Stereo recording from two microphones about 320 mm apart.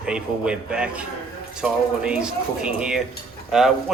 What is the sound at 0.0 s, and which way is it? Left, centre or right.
Speech, centre.